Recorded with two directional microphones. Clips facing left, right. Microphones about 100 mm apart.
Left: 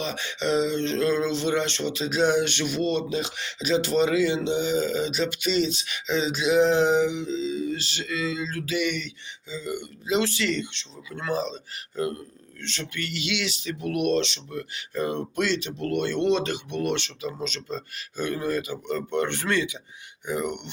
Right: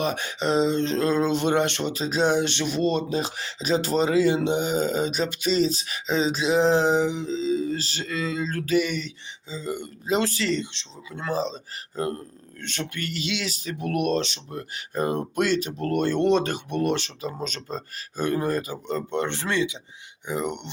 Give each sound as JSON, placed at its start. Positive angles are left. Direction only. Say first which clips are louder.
{"t": 0.0, "sound": "speech", "louder": "right 3 dB", "side_deg": -50}
{"t": 4.4, "sound": "speech", "louder": "right 1 dB", "side_deg": -50}